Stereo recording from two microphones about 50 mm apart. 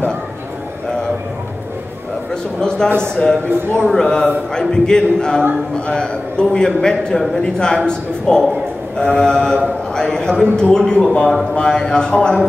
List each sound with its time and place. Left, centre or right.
3.0 s a man's voice: centre